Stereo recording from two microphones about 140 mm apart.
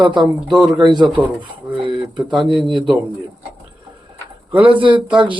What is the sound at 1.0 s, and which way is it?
Speech, centre (ahead or behind).